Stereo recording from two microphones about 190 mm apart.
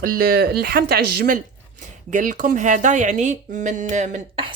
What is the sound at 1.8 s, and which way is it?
Speech, 45° right (ahead or behind).